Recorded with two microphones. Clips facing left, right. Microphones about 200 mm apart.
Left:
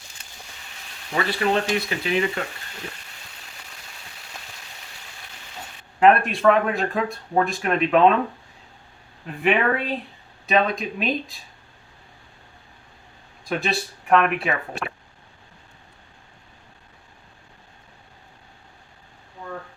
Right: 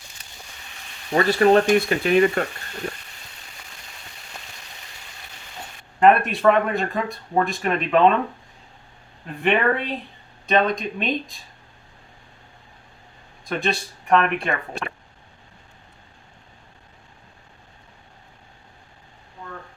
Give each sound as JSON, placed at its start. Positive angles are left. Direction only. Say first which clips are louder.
{"t": 1.1, "sound": "speech", "louder": "right 7 dB", "side_deg": -40}
{"t": 6.0, "sound": "speech", "louder": "even", "side_deg": 0}
{"t": 9.2, "sound": "speech", "louder": "right 1 dB", "side_deg": 0}
{"t": 13.4, "sound": "speech", "louder": "right 1 dB", "side_deg": 0}